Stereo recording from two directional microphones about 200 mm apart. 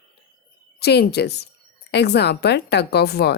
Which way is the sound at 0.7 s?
55° left (ahead or behind).